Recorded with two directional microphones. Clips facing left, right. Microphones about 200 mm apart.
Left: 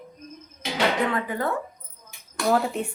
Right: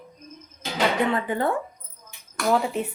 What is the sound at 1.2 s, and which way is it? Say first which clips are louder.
Speech: right 3 dB; 25° right (ahead or behind).